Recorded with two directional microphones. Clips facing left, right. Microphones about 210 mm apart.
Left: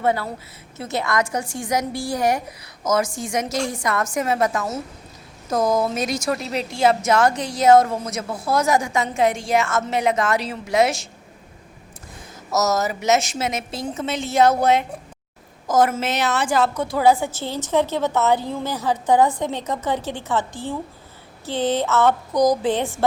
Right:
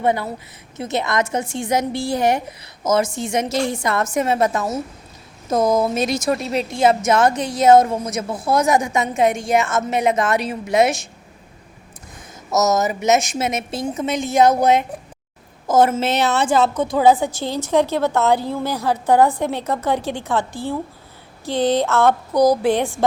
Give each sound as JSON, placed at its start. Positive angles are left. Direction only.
{"t": 0.0, "sound": "a woman's voice", "side_deg": -20}
{"t": 12.5, "sound": "a woman's voice", "side_deg": -20}